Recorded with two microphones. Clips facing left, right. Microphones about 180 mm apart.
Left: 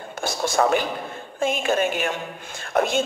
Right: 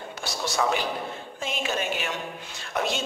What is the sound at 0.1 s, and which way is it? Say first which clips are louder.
A man's voice: left 7 dB; 50° left (ahead or behind).